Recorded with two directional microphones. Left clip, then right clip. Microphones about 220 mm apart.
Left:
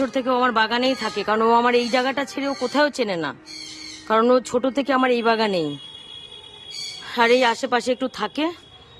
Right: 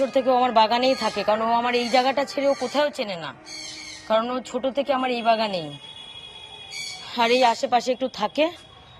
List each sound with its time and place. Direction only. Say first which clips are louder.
0.1 s speech: right 1 dB; 10° left (ahead or behind)
4.2 s speech: left 9 dB; 50° left (ahead or behind)
4.6 s speech: left 3 dB; 20° left (ahead or behind)
7.1 s speech: left 2 dB; 10° left (ahead or behind)